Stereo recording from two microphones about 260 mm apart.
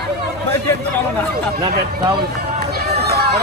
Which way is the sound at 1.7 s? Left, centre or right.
Right.